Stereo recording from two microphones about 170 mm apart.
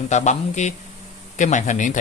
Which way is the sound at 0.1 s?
45° left (ahead or behind).